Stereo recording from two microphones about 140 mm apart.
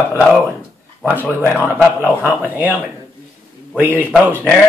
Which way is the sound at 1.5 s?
10° left (ahead or behind).